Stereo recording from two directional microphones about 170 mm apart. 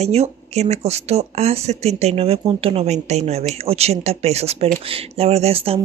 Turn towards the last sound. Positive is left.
turn(degrees=-35)  # may be behind; listen again after turning